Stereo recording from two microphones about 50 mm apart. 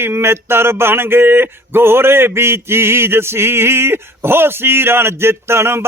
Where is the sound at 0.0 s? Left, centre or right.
Right.